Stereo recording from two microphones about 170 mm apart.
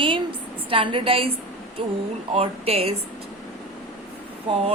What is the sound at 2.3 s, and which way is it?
Speech, 35° right (ahead or behind).